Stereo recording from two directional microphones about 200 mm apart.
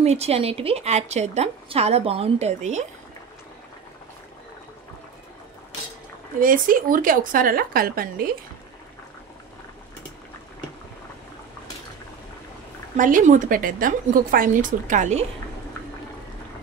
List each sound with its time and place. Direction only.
0.0 s a woman's voice: 30° right (ahead or behind)
6.4 s a woman's voice: 45° right (ahead or behind)
12.9 s a woman's voice: 40° right (ahead or behind)